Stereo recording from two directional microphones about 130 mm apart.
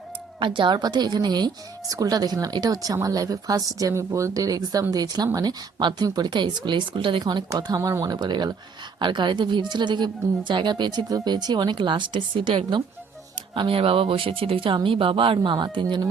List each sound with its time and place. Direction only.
0.3 s speech: 40° right (ahead or behind)
7.5 s speech: 25° right (ahead or behind)